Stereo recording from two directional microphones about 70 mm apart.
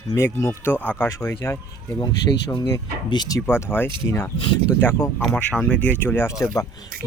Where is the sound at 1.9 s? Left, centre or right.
Left.